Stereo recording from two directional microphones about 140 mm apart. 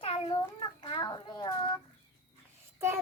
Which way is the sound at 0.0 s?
40° left (ahead or behind).